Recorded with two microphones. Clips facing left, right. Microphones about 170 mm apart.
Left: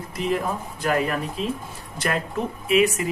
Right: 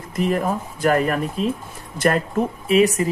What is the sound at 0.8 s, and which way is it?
Speech, 45° right (ahead or behind).